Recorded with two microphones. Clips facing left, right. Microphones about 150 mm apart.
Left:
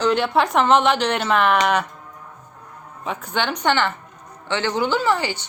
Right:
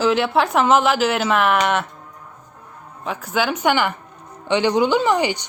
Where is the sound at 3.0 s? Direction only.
Centre (ahead or behind).